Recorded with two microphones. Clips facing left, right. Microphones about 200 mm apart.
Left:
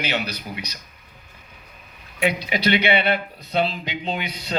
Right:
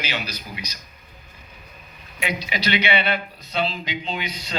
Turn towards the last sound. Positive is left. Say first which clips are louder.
# left 2 dB
turn(degrees=60)  # may be behind; listen again after turning